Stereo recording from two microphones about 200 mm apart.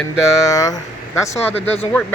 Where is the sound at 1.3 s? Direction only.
30° left (ahead or behind).